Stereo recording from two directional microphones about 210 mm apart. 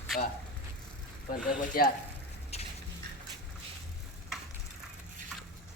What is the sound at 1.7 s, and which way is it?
Speech, 45° left (ahead or behind).